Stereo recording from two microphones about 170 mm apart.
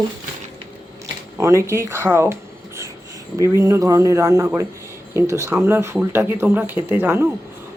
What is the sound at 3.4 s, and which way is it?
Speech, 15° right (ahead or behind).